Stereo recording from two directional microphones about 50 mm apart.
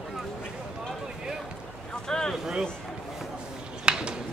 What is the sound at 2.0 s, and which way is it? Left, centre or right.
Vehicle, centre.